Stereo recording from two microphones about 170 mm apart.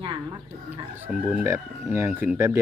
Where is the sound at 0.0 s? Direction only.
25° right (ahead or behind).